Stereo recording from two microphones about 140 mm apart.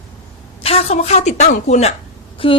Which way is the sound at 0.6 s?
45° left (ahead or behind).